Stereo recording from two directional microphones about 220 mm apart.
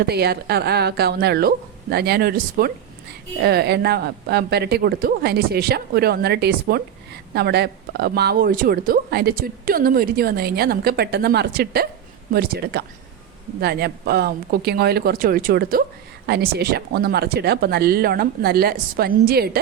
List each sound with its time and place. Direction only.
0.1 s speech: 45° right (ahead or behind)